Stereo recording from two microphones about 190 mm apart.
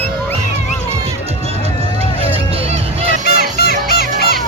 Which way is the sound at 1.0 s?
35° right (ahead or behind).